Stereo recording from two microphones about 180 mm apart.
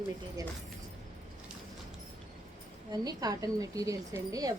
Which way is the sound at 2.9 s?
20° right (ahead or behind).